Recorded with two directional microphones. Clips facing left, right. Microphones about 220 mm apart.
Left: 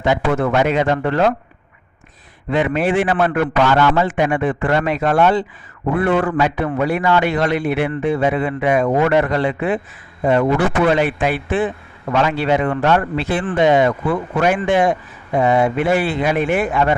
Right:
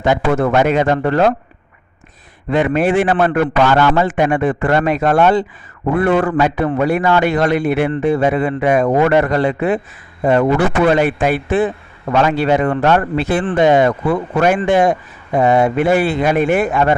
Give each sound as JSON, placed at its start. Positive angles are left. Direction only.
{"t": 0.0, "sound": "a man's voice", "side_deg": -45}
{"t": 2.5, "sound": "a man's voice", "side_deg": -45}
{"t": 10.8, "sound": "a man's voice", "side_deg": -45}